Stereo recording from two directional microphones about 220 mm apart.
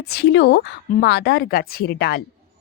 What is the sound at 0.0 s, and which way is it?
Speech, 45° left (ahead or behind).